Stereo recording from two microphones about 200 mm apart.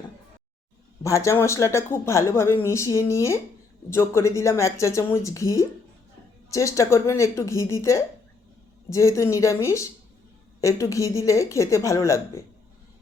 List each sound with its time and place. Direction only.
1.0 s speech: 15° left (ahead or behind)